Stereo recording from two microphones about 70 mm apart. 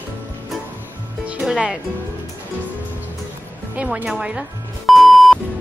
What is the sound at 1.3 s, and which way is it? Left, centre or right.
Music, centre.